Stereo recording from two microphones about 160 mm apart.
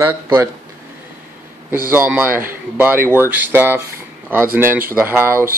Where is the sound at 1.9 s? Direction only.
10° right (ahead or behind).